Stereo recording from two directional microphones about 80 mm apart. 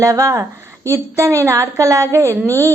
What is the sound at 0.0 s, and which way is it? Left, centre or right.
A woman's voice, right.